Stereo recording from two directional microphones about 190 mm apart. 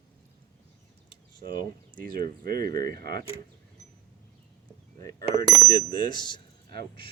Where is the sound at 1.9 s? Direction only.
50° right (ahead or behind).